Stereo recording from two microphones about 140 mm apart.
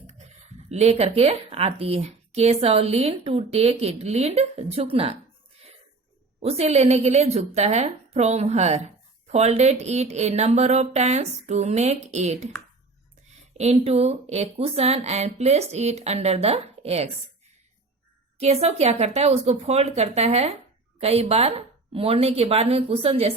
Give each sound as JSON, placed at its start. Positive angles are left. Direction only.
{"t": 0.1, "sound": "a woman's voice", "side_deg": -50}
{"t": 6.4, "sound": "a woman's voice", "side_deg": -50}
{"t": 13.6, "sound": "a woman's voice", "side_deg": -50}
{"t": 18.3, "sound": "a woman's voice", "side_deg": -50}